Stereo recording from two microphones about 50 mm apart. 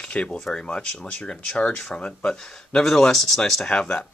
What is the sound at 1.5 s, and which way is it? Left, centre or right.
Speech, left.